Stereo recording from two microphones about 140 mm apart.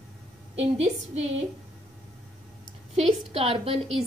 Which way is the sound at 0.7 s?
50° right (ahead or behind).